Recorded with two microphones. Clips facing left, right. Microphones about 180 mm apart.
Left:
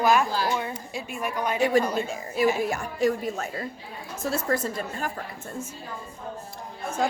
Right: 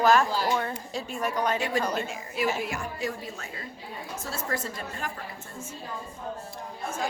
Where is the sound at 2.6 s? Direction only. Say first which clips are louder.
Left 7 dB; 45° left (ahead or behind).